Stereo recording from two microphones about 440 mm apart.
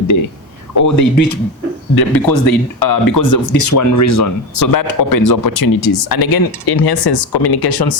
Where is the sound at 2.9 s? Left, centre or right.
Left.